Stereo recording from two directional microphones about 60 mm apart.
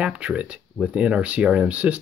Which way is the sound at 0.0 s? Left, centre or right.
Centre.